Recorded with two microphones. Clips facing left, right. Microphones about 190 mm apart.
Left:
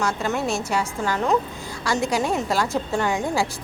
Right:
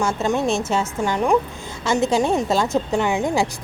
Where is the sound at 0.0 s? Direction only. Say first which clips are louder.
Right 4 dB; 25° right (ahead or behind).